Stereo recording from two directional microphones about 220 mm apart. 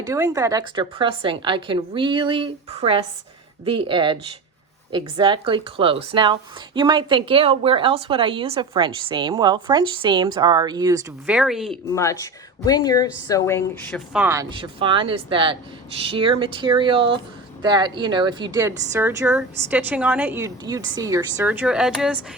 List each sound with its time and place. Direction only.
0.0 s a woman's voice: 15° right (ahead or behind)
11.3 s speech: 5° right (ahead or behind)
11.9 s a woman's voice: 15° left (ahead or behind)
13.9 s speech: 5° right (ahead or behind)
14.5 s a woman's voice: 25° right (ahead or behind); by 22.2 s 5° right (ahead or behind)